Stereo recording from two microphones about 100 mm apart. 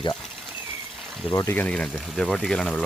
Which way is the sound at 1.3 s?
30° left (ahead or behind).